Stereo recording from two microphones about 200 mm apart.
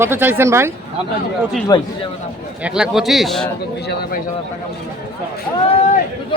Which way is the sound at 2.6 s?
5° right (ahead or behind).